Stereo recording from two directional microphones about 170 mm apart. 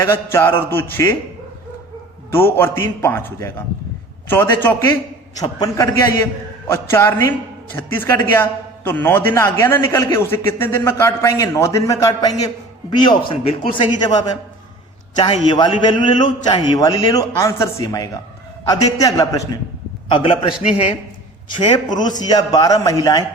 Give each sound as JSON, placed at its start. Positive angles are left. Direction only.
{"t": 0.0, "sound": "a man's voice", "side_deg": 15}
{"t": 2.3, "sound": "a man's voice", "side_deg": 15}
{"t": 21.6, "sound": "speech", "side_deg": 25}